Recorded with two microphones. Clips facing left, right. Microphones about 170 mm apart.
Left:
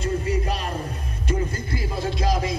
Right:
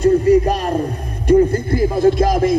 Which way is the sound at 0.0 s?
55° right (ahead or behind).